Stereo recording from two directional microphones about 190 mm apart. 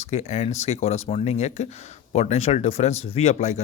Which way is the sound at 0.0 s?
35° left (ahead or behind).